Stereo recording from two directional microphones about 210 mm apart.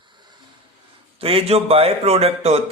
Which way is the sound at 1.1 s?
25° right (ahead or behind).